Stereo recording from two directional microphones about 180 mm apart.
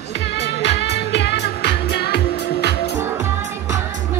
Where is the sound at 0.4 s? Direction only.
70° left (ahead or behind).